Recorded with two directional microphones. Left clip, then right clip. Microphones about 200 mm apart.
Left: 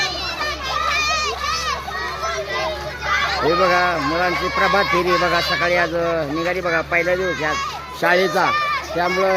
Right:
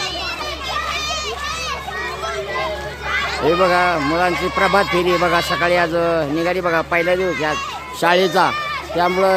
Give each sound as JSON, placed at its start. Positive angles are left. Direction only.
{"t": 0.9, "sound": "children playing", "side_deg": 20}
{"t": 3.4, "sound": "a child's voice", "side_deg": -10}
{"t": 4.1, "sound": "a child's voice", "side_deg": -20}